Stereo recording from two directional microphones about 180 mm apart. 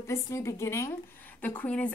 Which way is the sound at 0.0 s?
15° left (ahead or behind).